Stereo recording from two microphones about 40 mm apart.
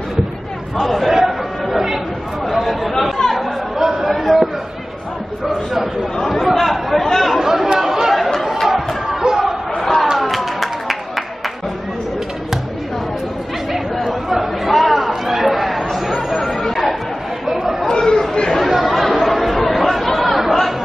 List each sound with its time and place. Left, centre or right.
0.7 s chatter: centre
2.6 s chatter: centre
4.1 s a sound: centre
6.2 s speech: centre
7.3 s speech: centre
8.5 s a sound: centre
9.2 s chatter: centre
10.2 s a sound: centre
13.7 s chatter: centre
17.8 s chatter: centre
18.6 s chatter: centre